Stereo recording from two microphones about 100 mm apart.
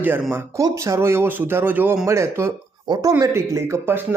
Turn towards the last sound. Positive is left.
turn(degrees=-25)  # may be behind; listen again after turning